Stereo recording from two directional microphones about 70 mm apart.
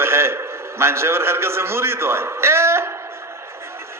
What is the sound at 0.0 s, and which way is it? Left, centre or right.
A man's voice, right.